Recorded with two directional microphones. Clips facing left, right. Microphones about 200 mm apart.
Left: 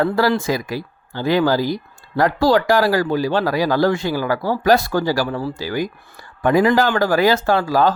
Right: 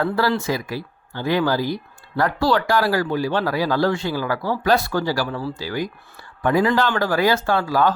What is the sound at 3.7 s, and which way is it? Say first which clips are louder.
Speech: left 3 dB; 40° left (ahead or behind).